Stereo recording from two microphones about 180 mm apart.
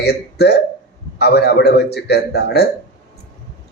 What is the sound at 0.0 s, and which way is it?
Speech, 65° left (ahead or behind).